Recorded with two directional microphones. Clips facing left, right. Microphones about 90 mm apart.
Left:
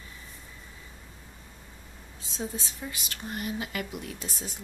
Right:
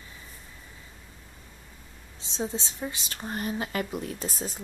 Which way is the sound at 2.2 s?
25° right (ahead or behind).